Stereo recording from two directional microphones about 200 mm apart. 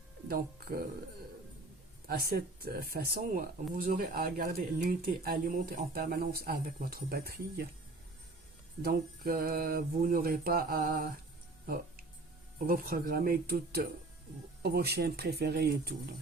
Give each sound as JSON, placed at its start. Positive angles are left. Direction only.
{"t": 0.3, "sound": "speech", "side_deg": -45}
{"t": 2.0, "sound": "speech", "side_deg": -50}
{"t": 8.8, "sound": "speech", "side_deg": -50}
{"t": 11.6, "sound": "music", "side_deg": -45}
{"t": 12.5, "sound": "speech", "side_deg": -45}